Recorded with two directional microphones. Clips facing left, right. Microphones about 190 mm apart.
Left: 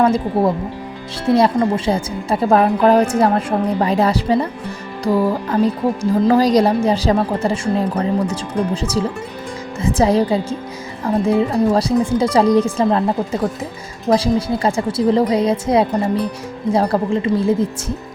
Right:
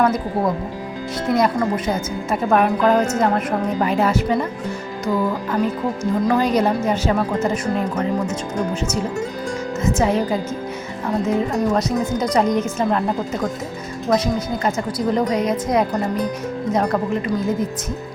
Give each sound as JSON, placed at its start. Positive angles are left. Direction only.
{"t": 0.0, "sound": "a woman's voice", "side_deg": 30}